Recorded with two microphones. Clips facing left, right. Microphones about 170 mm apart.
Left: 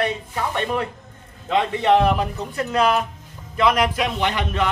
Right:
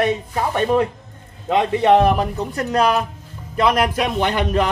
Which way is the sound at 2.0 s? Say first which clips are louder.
Right 3 dB; 40° right (ahead or behind).